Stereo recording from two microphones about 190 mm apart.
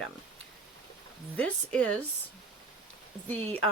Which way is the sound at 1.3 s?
5° left (ahead or behind).